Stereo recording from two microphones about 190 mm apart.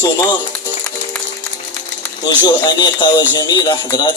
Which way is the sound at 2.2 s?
20° left (ahead or behind).